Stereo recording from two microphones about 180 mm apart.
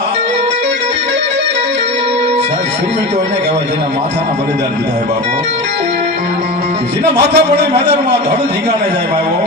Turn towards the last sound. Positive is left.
turn(degrees=-65)  # may be behind; listen again after turning